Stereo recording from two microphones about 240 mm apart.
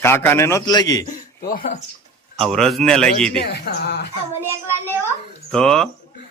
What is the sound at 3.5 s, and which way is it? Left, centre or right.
Speech, left.